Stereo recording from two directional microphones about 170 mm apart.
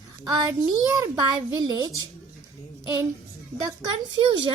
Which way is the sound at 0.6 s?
20° right (ahead or behind).